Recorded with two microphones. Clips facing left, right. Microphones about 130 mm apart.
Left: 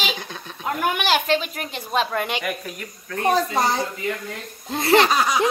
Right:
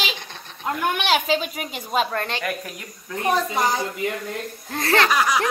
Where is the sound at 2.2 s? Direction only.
10° left (ahead or behind).